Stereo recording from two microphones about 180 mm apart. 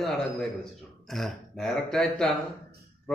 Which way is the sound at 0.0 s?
Centre (ahead or behind).